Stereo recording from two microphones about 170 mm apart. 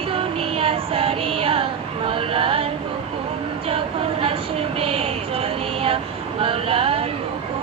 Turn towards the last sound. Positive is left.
turn(degrees=-35)  # may be behind; listen again after turning